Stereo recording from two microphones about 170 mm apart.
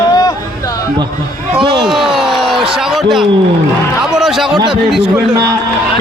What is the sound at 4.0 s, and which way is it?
A man's voice, centre (ahead or behind).